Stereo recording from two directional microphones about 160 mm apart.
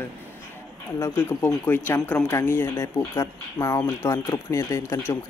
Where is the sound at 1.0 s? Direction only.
10° left (ahead or behind).